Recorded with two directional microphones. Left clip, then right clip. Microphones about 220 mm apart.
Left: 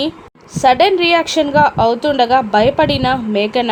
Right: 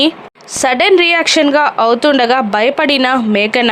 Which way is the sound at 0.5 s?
25° right (ahead or behind).